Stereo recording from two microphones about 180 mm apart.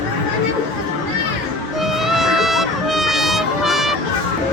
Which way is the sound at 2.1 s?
Centre (ahead or behind).